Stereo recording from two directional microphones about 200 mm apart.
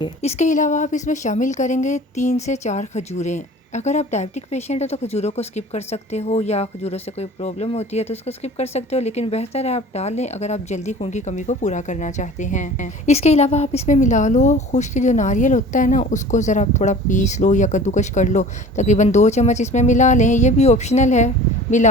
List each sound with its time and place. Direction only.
0.2 s a woman's voice: 35° left (ahead or behind)